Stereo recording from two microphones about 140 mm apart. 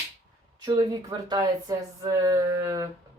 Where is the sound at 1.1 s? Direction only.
30° right (ahead or behind).